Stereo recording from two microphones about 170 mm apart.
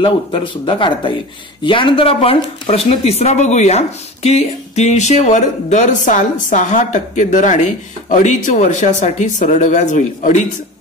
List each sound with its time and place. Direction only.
0.0 s speech: 30° left (ahead or behind); by 10.4 s 45° left (ahead or behind)